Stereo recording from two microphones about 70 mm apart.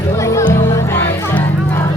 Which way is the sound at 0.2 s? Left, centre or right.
Left.